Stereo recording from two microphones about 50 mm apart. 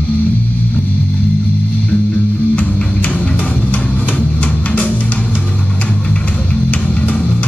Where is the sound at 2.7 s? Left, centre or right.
Left.